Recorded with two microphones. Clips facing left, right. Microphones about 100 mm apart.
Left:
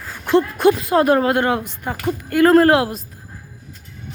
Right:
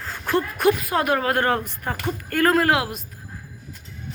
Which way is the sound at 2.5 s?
30° left (ahead or behind).